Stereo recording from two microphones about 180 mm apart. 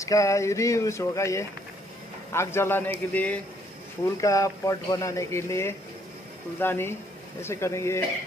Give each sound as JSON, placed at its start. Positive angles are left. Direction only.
{"t": 0.0, "sound": "speech", "side_deg": 20}